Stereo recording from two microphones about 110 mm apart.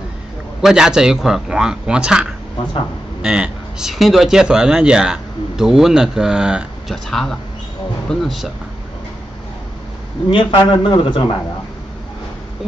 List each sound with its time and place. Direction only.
0.6 s speech: 5° right (ahead or behind)
7.1 s speech: 5° left (ahead or behind)
10.3 s speech: 45° left (ahead or behind)